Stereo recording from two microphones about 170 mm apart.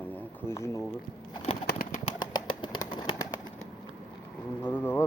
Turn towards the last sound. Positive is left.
turn(degrees=15)  # may be behind; listen again after turning